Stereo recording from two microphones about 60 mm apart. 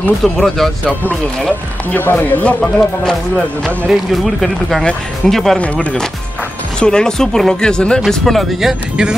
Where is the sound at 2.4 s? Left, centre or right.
Centre.